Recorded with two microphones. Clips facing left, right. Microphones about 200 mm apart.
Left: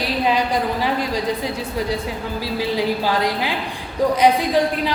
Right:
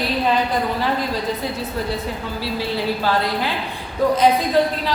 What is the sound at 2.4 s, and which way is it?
A woman's voice, 15° left (ahead or behind).